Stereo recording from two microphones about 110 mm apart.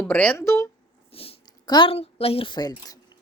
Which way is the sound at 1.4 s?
40° left (ahead or behind).